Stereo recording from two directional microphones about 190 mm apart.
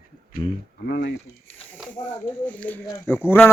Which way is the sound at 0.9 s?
60° left (ahead or behind).